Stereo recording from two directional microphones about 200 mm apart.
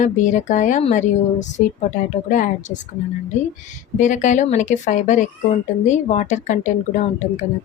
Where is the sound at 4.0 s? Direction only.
40° left (ahead or behind).